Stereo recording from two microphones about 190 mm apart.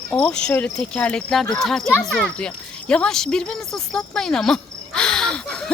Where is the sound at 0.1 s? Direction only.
5° left (ahead or behind).